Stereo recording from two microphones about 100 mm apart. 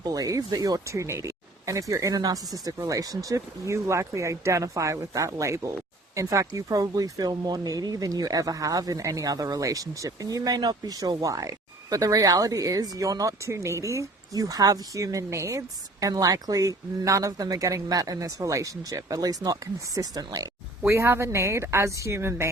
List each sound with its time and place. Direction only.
0.0 s speech: 35° right (ahead or behind)
20.8 s speech: 25° right (ahead or behind)